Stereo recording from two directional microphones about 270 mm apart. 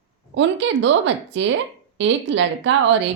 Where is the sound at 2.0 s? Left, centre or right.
Right.